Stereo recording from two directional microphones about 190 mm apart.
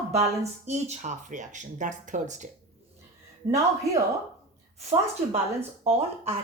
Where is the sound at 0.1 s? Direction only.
35° right (ahead or behind).